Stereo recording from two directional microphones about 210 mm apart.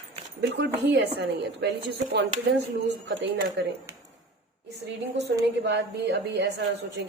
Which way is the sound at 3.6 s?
55° right (ahead or behind).